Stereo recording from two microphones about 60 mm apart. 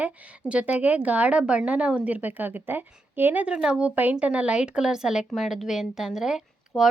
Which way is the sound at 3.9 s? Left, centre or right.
Right.